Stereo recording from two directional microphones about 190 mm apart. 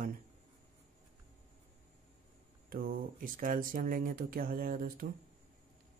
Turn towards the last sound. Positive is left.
turn(degrees=-50)  # may be behind; listen again after turning